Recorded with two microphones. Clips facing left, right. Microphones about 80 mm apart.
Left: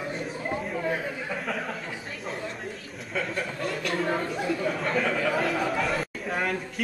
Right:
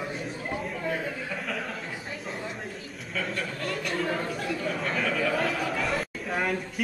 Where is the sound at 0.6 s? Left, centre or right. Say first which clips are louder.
Left 1 dB; centre.